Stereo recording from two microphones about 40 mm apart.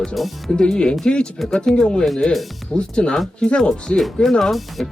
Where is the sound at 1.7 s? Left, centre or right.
Left.